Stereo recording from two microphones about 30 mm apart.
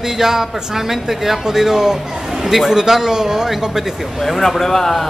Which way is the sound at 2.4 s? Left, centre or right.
Centre.